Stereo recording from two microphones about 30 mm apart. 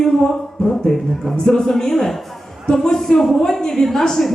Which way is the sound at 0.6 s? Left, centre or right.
Left.